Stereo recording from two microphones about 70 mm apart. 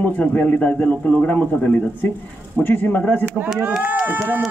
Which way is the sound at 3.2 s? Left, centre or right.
Right.